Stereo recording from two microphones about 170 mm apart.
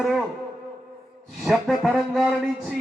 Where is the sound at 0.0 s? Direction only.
Centre (ahead or behind).